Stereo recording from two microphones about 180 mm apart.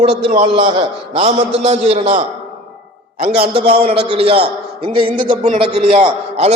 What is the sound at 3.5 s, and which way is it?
A man's voice, 35° right (ahead or behind).